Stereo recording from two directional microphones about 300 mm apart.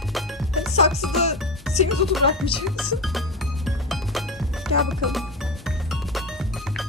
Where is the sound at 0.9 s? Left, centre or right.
Centre.